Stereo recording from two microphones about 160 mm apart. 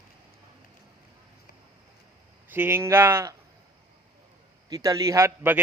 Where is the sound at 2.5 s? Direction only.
15° right (ahead or behind).